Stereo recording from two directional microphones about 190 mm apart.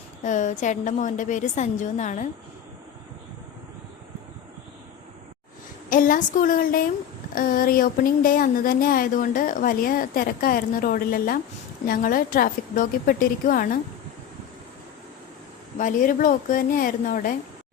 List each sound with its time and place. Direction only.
0.2 s a woman's voice: 40° left (ahead or behind)
5.9 s speech: 45° left (ahead or behind)
15.8 s speech: 45° left (ahead or behind)